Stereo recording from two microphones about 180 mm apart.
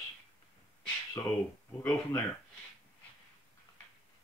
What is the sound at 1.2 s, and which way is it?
Speech, 15° left (ahead or behind).